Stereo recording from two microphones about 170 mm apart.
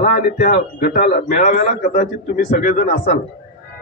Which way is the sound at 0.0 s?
50° left (ahead or behind).